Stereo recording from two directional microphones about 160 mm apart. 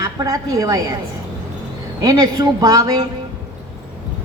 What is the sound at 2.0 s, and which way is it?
A woman's voice, 20° right (ahead or behind).